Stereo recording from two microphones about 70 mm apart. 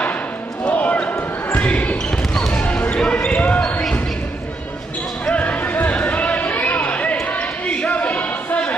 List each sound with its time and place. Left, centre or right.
0.7 s basketball bounce: left
5.2 s music: centre